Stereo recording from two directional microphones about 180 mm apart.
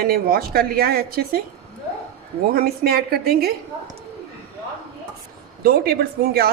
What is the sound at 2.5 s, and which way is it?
A woman's voice, 55° right (ahead or behind).